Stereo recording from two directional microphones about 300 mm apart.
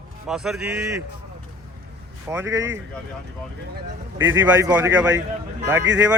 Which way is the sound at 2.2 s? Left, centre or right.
Centre.